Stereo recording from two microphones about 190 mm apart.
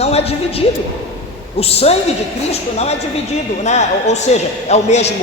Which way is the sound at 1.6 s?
30° left (ahead or behind).